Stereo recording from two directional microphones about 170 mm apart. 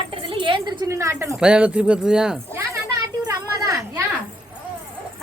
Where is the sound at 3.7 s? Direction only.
20° right (ahead or behind).